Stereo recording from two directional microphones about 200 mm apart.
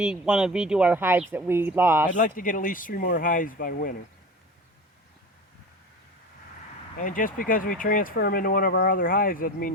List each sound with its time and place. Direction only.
0.0 s speech: 5° right (ahead or behind)
2.1 s speech: 45° left (ahead or behind)
7.0 s speech: 40° left (ahead or behind)